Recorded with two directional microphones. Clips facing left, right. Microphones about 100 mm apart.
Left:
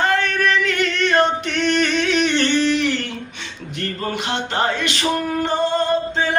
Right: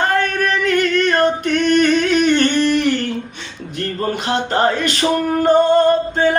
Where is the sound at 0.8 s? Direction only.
45° right (ahead or behind).